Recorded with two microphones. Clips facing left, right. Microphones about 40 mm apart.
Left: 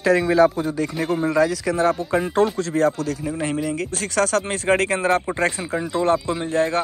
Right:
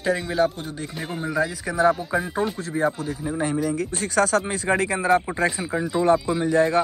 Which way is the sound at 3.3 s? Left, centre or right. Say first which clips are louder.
Right 3 dB; left.